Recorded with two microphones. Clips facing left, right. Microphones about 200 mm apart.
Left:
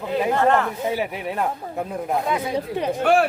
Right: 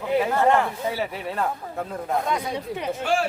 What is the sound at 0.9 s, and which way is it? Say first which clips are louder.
Speech: left 3 dB; 15° left (ahead or behind).